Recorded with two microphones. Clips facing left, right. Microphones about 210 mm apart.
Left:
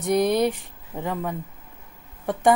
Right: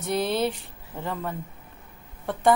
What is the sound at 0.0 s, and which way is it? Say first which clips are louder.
A woman's voice: left 5 dB; 15° left (ahead or behind).